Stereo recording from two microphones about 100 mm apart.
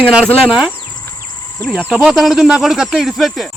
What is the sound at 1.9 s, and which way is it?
Speech, 10° right (ahead or behind).